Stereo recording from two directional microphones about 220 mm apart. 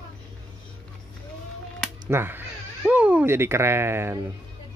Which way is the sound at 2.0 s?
10° right (ahead or behind).